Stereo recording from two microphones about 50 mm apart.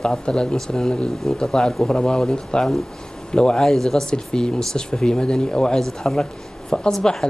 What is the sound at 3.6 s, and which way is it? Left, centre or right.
Speech, centre.